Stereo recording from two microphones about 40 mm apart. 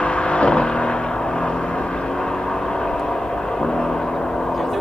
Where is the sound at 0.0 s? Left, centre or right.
Left.